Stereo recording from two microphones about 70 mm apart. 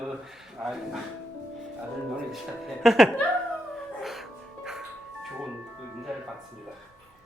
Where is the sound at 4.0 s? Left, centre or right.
Centre.